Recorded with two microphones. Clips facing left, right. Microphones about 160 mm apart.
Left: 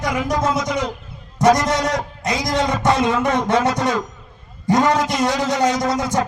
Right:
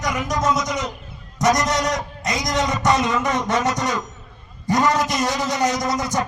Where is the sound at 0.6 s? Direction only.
60° left (ahead or behind).